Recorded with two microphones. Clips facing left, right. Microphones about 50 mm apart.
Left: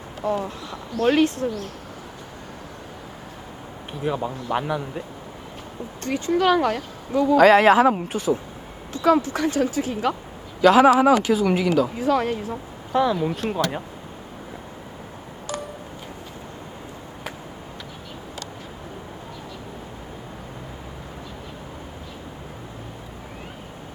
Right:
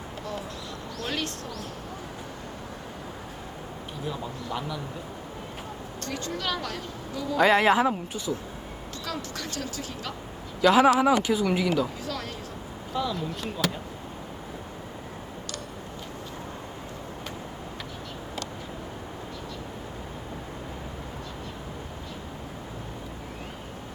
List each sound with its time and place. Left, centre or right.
0.2 s speech: left
0.9 s a man's voice: left
4.0 s a man's voice: left
6.1 s a man's voice: left
8.9 s speech: left
11.0 s speech: left
13.4 s speech: left